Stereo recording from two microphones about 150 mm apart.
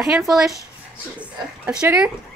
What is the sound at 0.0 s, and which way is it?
A woman's voice, 5° right (ahead or behind).